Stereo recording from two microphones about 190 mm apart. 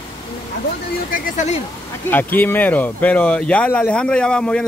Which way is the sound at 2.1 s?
10° left (ahead or behind).